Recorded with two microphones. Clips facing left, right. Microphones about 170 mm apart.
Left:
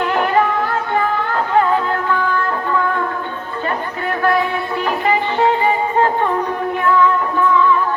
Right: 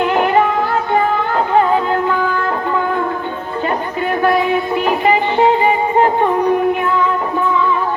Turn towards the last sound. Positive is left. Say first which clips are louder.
# right 3 dB
turn(degrees=-15)  # may be behind; listen again after turning